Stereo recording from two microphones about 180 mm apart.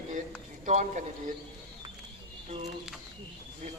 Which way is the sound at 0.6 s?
45° right (ahead or behind).